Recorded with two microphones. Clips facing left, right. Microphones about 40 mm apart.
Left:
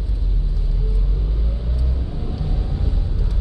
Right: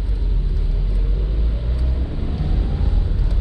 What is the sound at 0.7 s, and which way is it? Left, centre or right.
Vehicle, right.